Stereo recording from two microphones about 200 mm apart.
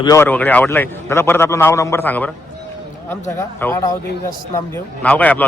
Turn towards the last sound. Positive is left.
turn(degrees=10)  # may be behind; listen again after turning